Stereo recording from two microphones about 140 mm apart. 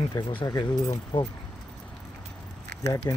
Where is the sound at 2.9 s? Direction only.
25° left (ahead or behind).